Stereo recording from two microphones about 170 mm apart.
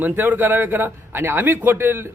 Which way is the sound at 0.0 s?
10° right (ahead or behind).